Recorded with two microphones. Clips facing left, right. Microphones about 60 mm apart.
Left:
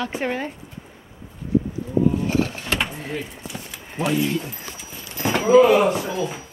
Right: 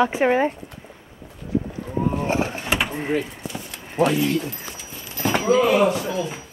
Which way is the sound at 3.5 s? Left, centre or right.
Centre.